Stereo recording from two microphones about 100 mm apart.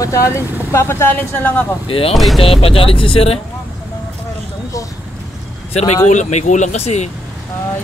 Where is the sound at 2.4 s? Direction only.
70° left (ahead or behind).